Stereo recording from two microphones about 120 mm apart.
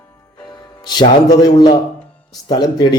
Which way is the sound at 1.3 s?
35° left (ahead or behind).